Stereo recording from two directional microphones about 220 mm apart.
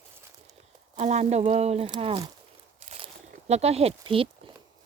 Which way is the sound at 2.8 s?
25° right (ahead or behind).